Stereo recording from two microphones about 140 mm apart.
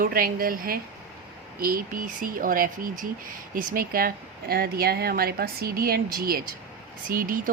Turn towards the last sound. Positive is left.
turn(degrees=-85)